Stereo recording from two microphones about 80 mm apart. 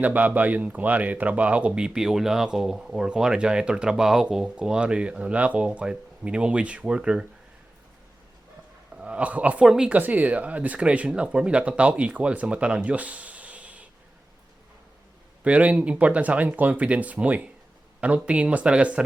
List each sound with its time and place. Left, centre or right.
0.0 s speech: centre
9.0 s speech: centre
15.4 s speech: centre